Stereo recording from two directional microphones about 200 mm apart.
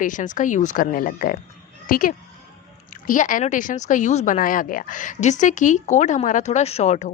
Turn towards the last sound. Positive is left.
turn(degrees=35)  # may be behind; listen again after turning